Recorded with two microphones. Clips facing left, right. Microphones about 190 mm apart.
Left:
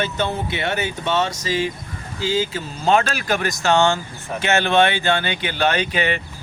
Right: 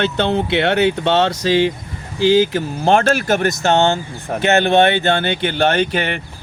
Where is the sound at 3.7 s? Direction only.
20° right (ahead or behind).